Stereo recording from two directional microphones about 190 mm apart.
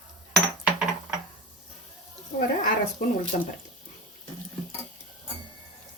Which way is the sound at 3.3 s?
40° left (ahead or behind).